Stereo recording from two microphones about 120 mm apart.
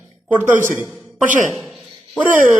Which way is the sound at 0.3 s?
20° right (ahead or behind).